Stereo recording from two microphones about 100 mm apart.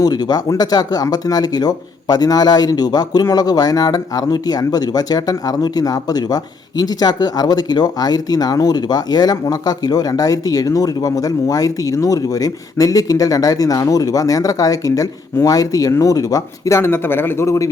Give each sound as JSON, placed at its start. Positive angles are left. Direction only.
{"t": 0.0, "sound": "speech", "side_deg": 45}